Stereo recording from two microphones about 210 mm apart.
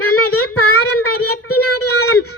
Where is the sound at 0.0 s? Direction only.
90° left.